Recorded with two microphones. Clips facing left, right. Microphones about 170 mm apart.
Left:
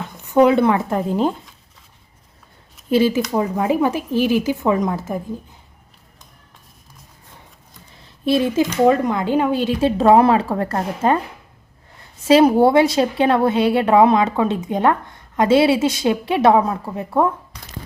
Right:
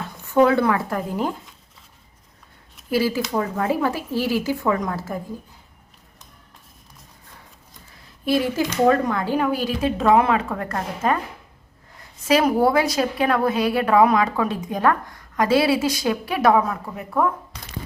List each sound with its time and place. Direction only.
0.2 s a woman's voice: 20° left (ahead or behind)
2.9 s a woman's voice: 20° left (ahead or behind)
8.0 s a sound: 25° left (ahead or behind)
8.7 s a woman's voice: 20° left (ahead or behind)
12.3 s a woman's voice: 30° left (ahead or behind)